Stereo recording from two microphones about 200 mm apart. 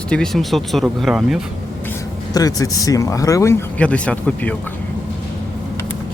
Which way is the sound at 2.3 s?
20° left (ahead or behind).